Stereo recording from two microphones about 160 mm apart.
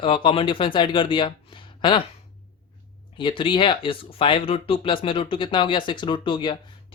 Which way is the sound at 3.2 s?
30° left (ahead or behind).